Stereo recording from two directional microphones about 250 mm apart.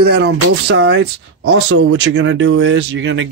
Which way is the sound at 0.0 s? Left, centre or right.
Right.